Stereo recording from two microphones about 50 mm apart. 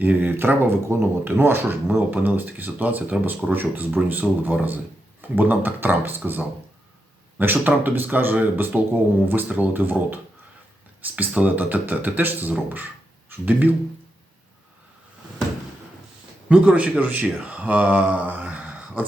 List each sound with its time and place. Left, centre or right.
0.0 s speech: right
11.2 s speech: right
16.5 s speech: right
17.0 s speech: right
18.4 s a sound: right